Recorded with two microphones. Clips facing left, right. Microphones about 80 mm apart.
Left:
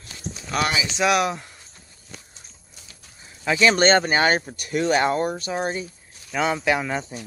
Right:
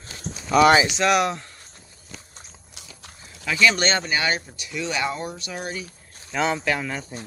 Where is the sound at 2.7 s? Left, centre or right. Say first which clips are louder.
Right 5 dB; right.